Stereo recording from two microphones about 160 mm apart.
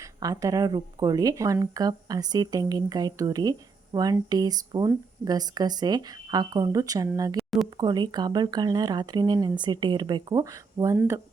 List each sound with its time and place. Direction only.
0.0 s speech: 20° right (ahead or behind)
7.3 s a sound: centre (ahead or behind)
7.8 s speech: 25° right (ahead or behind)